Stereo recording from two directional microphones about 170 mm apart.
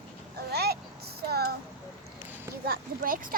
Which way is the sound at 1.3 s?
65° right (ahead or behind).